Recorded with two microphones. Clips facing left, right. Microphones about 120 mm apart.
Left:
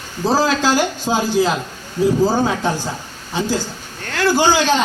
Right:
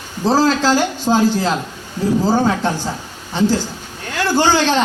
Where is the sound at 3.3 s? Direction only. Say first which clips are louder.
Right 4 dB; 5° left (ahead or behind).